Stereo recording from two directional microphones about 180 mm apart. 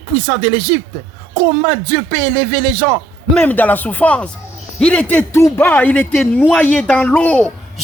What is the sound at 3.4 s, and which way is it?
Speech, 10° left (ahead or behind).